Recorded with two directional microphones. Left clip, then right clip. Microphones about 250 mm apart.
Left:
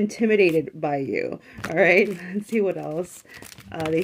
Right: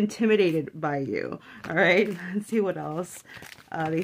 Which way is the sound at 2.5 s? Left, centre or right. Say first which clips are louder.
Left 3 dB; centre.